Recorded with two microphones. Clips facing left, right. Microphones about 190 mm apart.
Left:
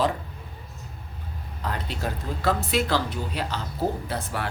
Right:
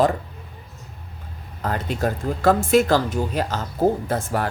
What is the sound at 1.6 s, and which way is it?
Speech, 45° right (ahead or behind).